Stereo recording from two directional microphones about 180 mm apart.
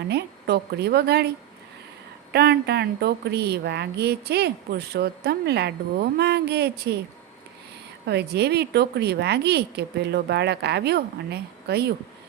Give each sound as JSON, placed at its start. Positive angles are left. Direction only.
{"t": 0.1, "sound": "a woman's voice", "side_deg": -65}
{"t": 2.3, "sound": "a woman's voice", "side_deg": -65}
{"t": 8.0, "sound": "a woman's voice", "side_deg": -65}